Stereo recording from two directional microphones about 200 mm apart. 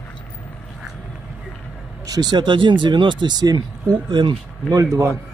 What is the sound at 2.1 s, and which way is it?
Speech, 20° right (ahead or behind).